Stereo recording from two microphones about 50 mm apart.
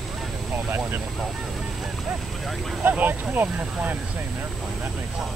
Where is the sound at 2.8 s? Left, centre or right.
Right.